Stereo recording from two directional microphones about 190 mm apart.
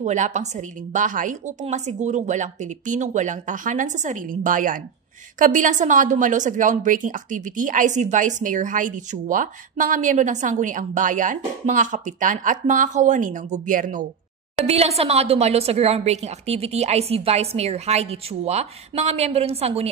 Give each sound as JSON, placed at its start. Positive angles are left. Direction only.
{"t": 0.0, "sound": "a woman's voice", "side_deg": -40}
{"t": 14.7, "sound": "a woman's voice", "side_deg": -35}